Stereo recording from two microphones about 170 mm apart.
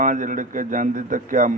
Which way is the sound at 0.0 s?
50° right (ahead or behind).